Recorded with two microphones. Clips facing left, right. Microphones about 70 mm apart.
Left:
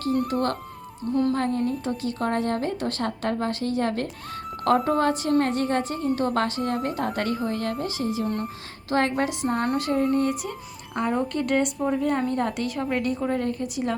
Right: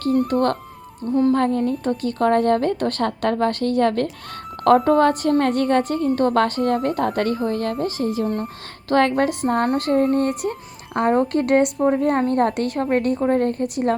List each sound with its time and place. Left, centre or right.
0.3 s a woman's voice: right